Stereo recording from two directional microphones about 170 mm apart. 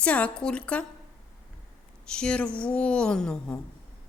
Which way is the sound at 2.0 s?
5° left (ahead or behind).